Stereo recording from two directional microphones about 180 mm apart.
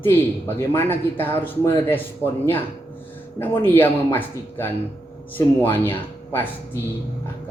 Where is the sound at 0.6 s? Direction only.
10° left (ahead or behind).